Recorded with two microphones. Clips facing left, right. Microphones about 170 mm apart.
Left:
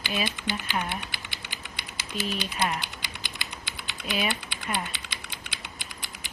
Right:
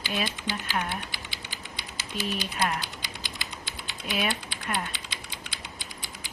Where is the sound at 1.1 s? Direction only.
60° left (ahead or behind).